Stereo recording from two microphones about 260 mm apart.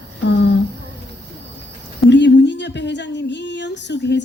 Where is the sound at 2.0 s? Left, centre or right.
Left.